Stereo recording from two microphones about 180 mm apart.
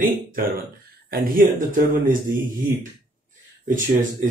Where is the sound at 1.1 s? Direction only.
50° right (ahead or behind).